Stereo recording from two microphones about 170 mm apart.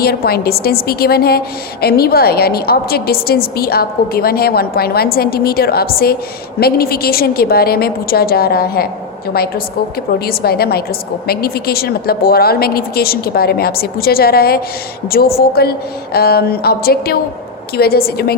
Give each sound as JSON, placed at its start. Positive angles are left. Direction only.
{"t": 0.0, "sound": "a woman's voice", "side_deg": 65}
{"t": 10.2, "sound": "a woman's voice", "side_deg": 65}